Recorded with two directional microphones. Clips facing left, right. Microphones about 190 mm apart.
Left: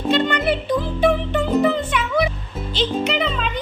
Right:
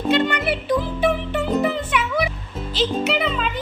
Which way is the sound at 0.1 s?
10° right (ahead or behind).